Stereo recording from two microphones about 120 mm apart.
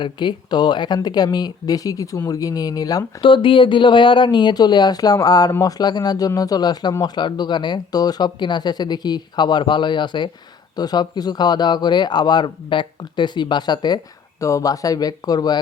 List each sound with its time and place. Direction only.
0.0 s speech: 40° left (ahead or behind)
3.2 s speech: 45° left (ahead or behind)